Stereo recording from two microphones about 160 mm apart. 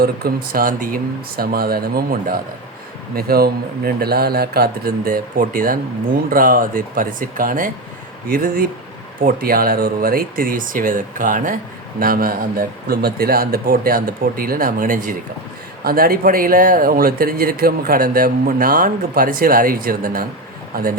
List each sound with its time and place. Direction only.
0.0 s speech: 75° right (ahead or behind)
15.8 s speech: 70° right (ahead or behind)